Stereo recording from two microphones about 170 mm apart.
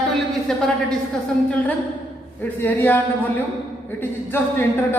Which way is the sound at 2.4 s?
10° left (ahead or behind).